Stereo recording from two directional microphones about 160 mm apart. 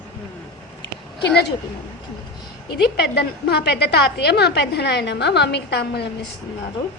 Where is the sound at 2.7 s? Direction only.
90° left.